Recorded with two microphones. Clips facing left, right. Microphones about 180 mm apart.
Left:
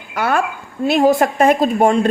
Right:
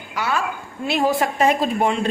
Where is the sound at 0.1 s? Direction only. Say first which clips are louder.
Left 5 dB; 55° left (ahead or behind).